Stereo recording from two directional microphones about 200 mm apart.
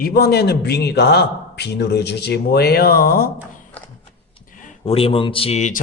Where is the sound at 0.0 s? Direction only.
50° left (ahead or behind).